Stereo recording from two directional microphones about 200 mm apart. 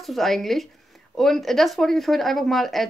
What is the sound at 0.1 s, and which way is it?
Speech, centre (ahead or behind).